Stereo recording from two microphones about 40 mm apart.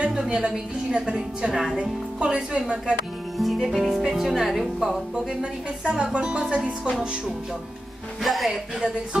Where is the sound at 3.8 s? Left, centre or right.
Centre.